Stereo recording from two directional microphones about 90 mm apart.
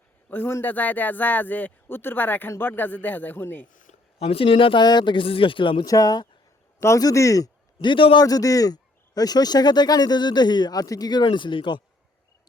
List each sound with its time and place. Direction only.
0.3 s a man's voice: 25° left (ahead or behind)
4.3 s speech: 90° left; by 5.8 s 70° left (ahead or behind)
5.8 s a man's voice: 40° left (ahead or behind)
6.7 s speech: 30° left (ahead or behind)
7.8 s a man's voice: 70° left (ahead or behind)
8.2 s a man's voice: 40° left (ahead or behind); by 11.8 s 65° left (ahead or behind)